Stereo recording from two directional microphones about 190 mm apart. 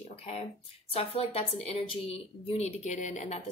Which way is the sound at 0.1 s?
30° left (ahead or behind).